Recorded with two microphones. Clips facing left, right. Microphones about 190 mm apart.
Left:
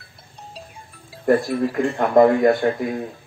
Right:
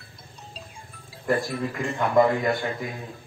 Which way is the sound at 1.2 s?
40° left (ahead or behind).